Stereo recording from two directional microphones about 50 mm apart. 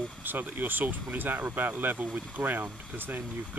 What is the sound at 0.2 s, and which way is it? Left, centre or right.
Speech, right.